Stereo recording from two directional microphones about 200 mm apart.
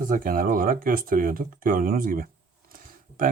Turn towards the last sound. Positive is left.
turn(degrees=-45)  # may be behind; listen again after turning